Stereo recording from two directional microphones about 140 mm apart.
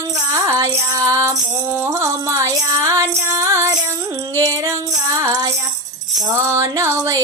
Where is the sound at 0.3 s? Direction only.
20° right (ahead or behind).